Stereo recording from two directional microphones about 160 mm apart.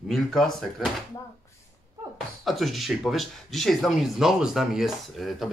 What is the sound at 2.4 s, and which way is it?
Speech, centre (ahead or behind).